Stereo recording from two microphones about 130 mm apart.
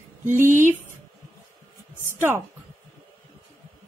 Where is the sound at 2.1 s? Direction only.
15° right (ahead or behind).